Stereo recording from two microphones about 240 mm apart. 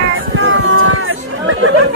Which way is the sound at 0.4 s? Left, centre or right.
Right.